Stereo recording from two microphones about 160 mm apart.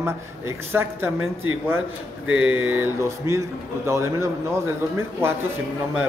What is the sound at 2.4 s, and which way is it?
A man's voice, 10° right (ahead or behind).